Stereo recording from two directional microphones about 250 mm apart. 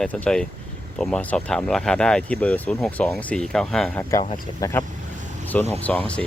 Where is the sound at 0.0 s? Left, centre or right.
Centre.